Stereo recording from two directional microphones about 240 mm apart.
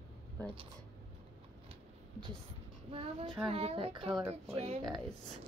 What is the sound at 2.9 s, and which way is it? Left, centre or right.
Speech, right.